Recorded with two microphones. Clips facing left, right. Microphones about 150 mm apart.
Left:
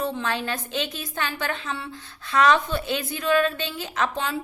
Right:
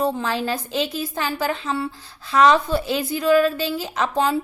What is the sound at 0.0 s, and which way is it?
A woman's voice, 35° right (ahead or behind).